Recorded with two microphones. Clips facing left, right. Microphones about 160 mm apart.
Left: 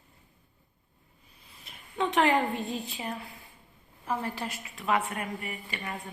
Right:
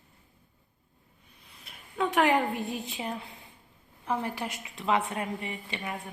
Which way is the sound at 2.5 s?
15° right (ahead or behind).